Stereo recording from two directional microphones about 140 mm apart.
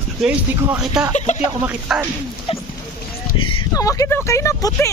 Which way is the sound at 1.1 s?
60° left (ahead or behind).